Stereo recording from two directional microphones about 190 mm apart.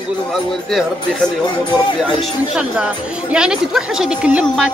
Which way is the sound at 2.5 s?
5° right (ahead or behind).